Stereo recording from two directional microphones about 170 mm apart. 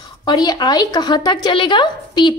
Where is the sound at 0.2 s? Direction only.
25° left (ahead or behind).